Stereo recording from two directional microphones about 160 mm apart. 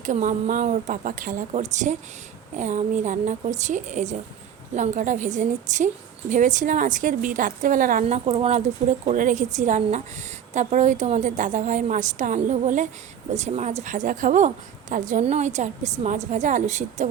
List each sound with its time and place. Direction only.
0.0 s a woman's voice: 55° right (ahead or behind)
8.0 s a woman's voice: 40° right (ahead or behind)
9.0 s a woman's voice: 50° right (ahead or behind)